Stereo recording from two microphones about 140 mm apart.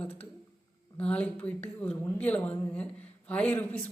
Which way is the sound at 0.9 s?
10° left (ahead or behind).